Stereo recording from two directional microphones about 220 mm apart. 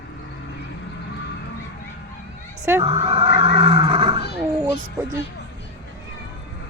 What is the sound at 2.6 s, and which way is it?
Roar, 15° right (ahead or behind).